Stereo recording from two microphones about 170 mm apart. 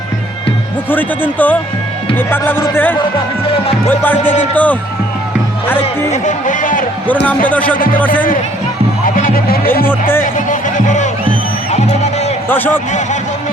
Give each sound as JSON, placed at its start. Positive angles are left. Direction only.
{"t": 0.9, "sound": "speech", "side_deg": 10}
{"t": 3.4, "sound": "music", "side_deg": 35}
{"t": 3.8, "sound": "speech", "side_deg": 10}
{"t": 5.8, "sound": "speech", "side_deg": 45}
{"t": 7.9, "sound": "speech", "side_deg": 10}
{"t": 9.0, "sound": "music", "side_deg": 55}
{"t": 10.3, "sound": "music", "side_deg": 45}
{"t": 12.5, "sound": "speech", "side_deg": 10}